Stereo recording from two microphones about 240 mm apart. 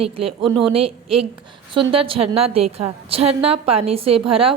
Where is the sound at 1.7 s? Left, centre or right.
Centre.